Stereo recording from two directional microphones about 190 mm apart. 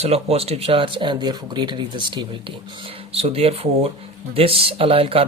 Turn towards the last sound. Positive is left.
turn(degrees=-30)  # may be behind; listen again after turning